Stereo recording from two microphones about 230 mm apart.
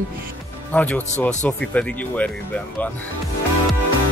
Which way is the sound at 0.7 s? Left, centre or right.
Centre.